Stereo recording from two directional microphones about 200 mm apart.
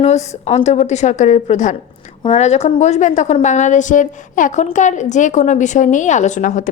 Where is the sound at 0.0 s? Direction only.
35° left (ahead or behind).